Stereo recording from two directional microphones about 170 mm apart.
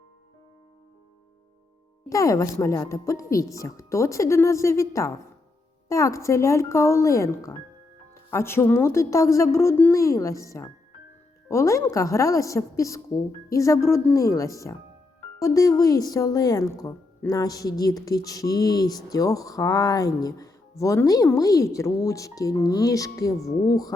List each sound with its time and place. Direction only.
2.0 s a woman's voice: 20° left (ahead or behind)